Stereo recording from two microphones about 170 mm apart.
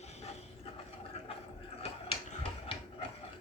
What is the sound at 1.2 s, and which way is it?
Gargling, 35° left (ahead or behind).